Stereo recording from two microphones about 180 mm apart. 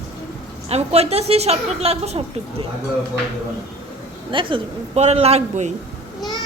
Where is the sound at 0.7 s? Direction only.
35° right (ahead or behind).